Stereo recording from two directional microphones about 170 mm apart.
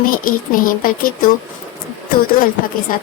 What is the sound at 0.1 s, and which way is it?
Speech, 55° left (ahead or behind).